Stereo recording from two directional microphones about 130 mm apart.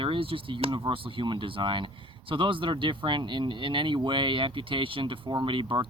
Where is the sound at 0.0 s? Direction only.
45° right (ahead or behind).